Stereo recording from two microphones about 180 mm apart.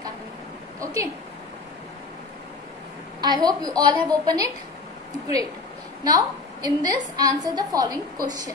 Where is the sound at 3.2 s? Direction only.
25° right (ahead or behind).